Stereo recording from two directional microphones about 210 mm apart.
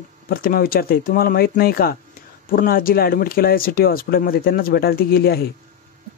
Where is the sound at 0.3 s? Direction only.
45° left (ahead or behind).